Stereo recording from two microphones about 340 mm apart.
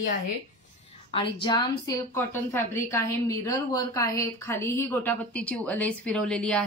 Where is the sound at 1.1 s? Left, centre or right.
Centre.